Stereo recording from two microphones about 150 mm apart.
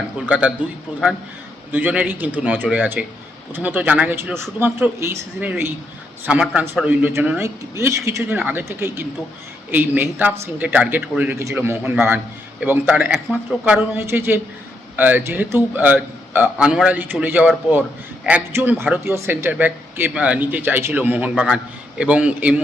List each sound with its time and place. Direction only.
0.3 s speech: 10° right (ahead or behind)
1.7 s speech: 10° right (ahead or behind)